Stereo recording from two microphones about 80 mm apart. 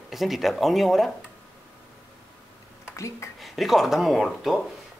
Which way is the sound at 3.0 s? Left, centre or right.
Left.